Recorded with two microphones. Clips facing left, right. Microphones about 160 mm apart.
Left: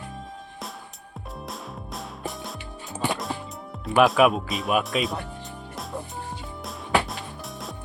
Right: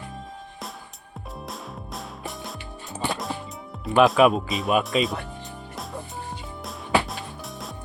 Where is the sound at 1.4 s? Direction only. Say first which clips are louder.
Even; centre (ahead or behind).